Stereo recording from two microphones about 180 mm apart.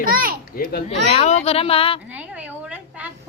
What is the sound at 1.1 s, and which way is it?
Speech, 40° left (ahead or behind).